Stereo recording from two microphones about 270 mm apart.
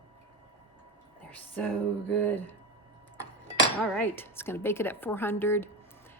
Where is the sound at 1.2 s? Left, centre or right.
Centre.